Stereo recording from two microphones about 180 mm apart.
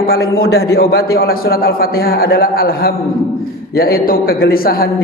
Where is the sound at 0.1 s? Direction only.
60° left (ahead or behind).